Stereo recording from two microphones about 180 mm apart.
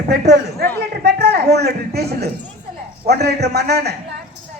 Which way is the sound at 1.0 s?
65° right (ahead or behind).